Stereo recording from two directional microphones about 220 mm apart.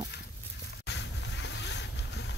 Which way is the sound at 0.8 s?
55° left (ahead or behind).